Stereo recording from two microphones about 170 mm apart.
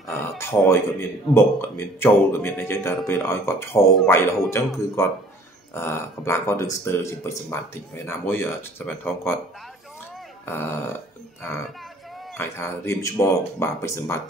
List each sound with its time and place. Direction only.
0.4 s speech: 15° left (ahead or behind)
3.8 s speech: centre (ahead or behind)
4.5 s speech: 15° left (ahead or behind)
10.4 s speech: 15° left (ahead or behind)
12.4 s speech: 15° left (ahead or behind)